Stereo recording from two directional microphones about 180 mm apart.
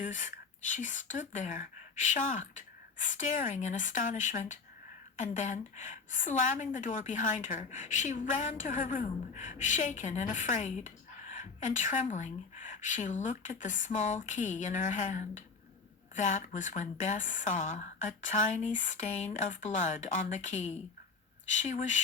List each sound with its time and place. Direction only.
0.0 s a woman's voice: 45° left (ahead or behind)